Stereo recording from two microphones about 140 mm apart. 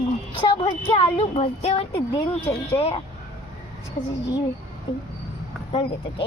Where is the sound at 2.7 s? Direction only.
40° left (ahead or behind).